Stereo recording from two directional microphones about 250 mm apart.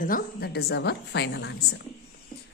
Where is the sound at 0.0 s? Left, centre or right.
Left.